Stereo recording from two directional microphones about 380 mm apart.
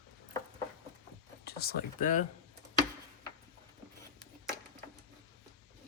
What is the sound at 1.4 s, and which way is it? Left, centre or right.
Speech, left.